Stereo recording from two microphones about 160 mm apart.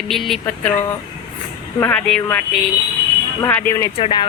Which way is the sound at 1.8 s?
10° left (ahead or behind).